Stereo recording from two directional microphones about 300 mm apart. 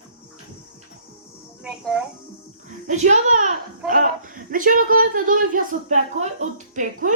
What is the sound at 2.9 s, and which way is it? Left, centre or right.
A child's voice, right.